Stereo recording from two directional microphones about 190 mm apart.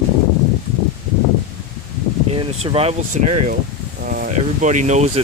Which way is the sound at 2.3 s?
30° right (ahead or behind).